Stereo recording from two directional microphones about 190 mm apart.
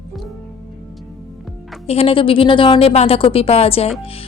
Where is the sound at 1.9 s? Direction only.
30° left (ahead or behind).